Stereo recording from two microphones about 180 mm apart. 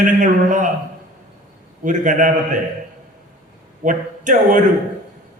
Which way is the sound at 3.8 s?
45° right (ahead or behind).